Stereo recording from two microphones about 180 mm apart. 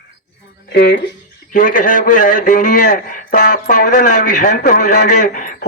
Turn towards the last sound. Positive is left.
turn(degrees=45)  # may be behind; listen again after turning